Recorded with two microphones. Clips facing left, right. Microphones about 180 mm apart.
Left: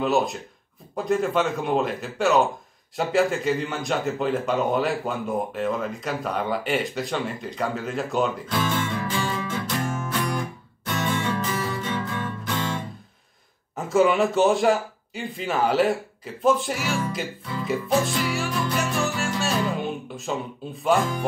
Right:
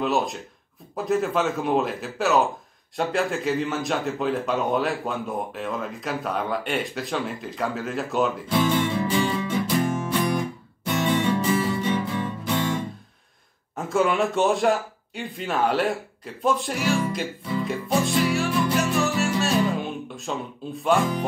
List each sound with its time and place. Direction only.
0.0 s speech: centre (ahead or behind)
8.5 s music: 15° right (ahead or behind)
11.5 s music: 25° right (ahead or behind)
11.8 s music: 15° right (ahead or behind)
13.7 s speech: centre (ahead or behind)
17.6 s music: centre (ahead or behind)